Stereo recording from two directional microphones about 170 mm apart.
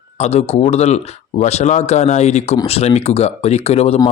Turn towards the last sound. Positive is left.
turn(degrees=35)  # may be behind; listen again after turning